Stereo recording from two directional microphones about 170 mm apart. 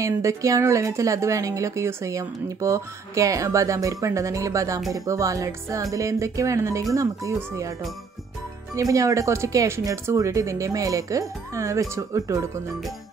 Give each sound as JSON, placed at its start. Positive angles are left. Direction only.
{"t": 0.0, "sound": "speech", "side_deg": -20}
{"t": 8.7, "sound": "speech", "side_deg": -20}